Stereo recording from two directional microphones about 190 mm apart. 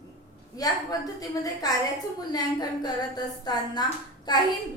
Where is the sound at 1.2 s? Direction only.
20° left (ahead or behind).